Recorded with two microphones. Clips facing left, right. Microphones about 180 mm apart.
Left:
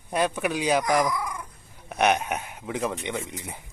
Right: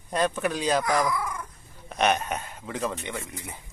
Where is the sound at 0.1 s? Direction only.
10° left (ahead or behind).